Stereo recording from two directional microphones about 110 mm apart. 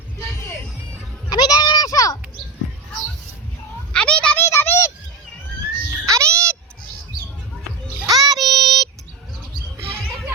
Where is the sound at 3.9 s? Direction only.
10° left (ahead or behind).